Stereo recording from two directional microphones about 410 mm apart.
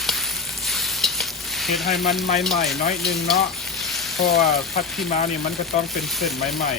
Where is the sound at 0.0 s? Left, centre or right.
Centre.